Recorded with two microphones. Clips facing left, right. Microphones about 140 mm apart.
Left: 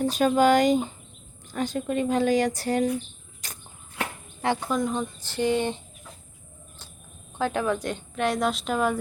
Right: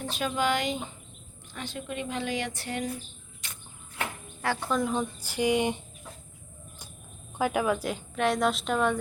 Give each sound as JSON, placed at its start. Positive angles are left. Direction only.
{"t": 0.0, "sound": "a woman's voice", "side_deg": 40}
{"t": 3.4, "sound": "cricket", "side_deg": 40}
{"t": 4.7, "sound": "speech", "side_deg": -5}
{"t": 7.3, "sound": "a woman's voice", "side_deg": -10}